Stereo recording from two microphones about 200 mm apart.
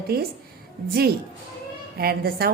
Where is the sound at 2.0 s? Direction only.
50° right (ahead or behind).